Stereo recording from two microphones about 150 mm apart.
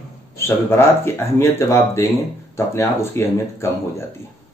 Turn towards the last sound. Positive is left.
turn(degrees=20)  # may be behind; listen again after turning